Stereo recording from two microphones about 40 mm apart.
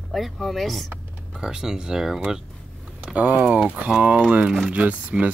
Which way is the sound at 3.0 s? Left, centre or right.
Right.